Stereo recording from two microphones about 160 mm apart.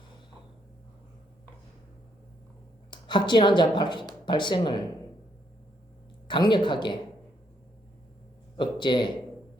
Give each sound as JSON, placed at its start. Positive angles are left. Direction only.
{"t": 2.9, "sound": "speech", "side_deg": 30}
{"t": 6.2, "sound": "speech", "side_deg": 30}
{"t": 8.5, "sound": "speech", "side_deg": 30}